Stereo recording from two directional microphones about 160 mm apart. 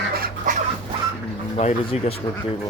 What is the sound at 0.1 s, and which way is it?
Duck, 70° right (ahead or behind).